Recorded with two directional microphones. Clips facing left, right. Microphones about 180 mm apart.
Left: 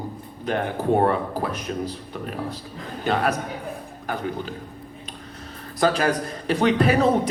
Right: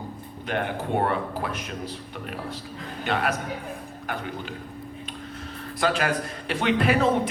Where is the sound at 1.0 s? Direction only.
35° left (ahead or behind).